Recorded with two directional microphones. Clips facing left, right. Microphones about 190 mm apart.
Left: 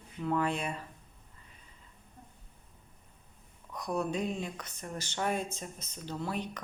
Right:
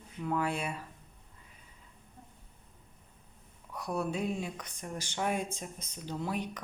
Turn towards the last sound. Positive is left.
turn(degrees=-10)  # may be behind; listen again after turning